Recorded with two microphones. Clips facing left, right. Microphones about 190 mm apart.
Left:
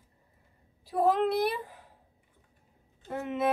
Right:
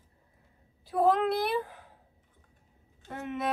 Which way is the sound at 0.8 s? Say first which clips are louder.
Even; centre (ahead or behind).